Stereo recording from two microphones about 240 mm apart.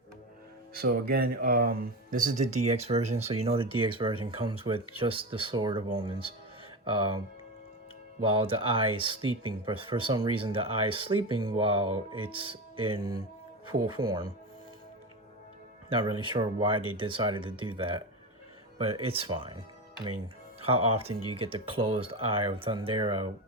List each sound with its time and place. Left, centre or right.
0.7 s speech: right
8.2 s speech: right
15.9 s speech: centre